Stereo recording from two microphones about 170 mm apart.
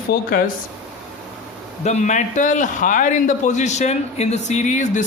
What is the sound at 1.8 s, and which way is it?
A man's voice, 45° left (ahead or behind).